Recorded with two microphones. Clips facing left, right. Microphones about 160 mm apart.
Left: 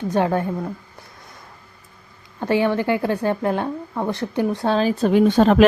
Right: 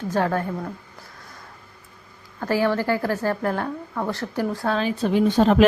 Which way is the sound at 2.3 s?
20° left (ahead or behind).